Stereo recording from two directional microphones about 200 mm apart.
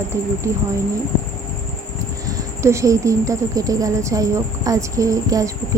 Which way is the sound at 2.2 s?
15° right (ahead or behind).